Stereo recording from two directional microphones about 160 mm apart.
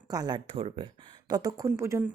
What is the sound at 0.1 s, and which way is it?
Speech, 25° right (ahead or behind).